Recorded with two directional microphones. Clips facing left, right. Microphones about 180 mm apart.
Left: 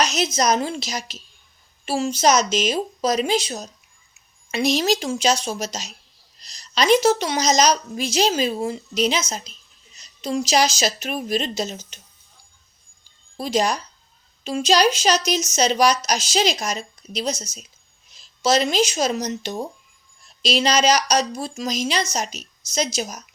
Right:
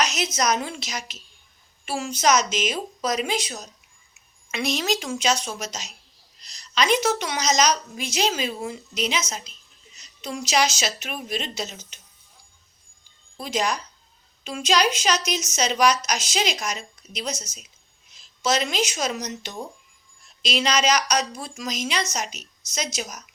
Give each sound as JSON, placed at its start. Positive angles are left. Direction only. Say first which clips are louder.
{"t": 0.0, "sound": "a sound", "louder": "left 4 dB", "side_deg": 30}
{"t": 0.3, "sound": "a woman's voice", "louder": "left 3 dB", "side_deg": 30}
{"t": 13.3, "sound": "a woman's voice", "louder": "left 4 dB", "side_deg": 35}